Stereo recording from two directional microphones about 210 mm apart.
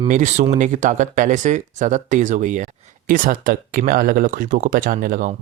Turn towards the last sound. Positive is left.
turn(degrees=-40)  # may be behind; listen again after turning